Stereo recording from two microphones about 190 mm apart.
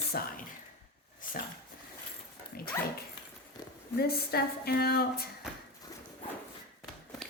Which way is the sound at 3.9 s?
55° left (ahead or behind).